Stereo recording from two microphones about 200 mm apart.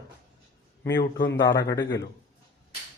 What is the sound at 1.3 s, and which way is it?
Speech, 15° left (ahead or behind).